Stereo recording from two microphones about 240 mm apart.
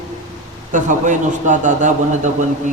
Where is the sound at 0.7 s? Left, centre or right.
Right.